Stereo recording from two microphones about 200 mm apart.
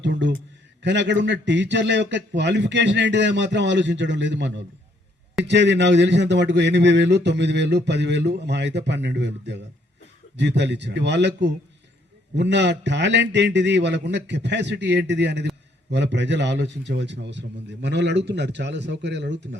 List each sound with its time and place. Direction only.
0.0 s a man's voice: 60° right (ahead or behind)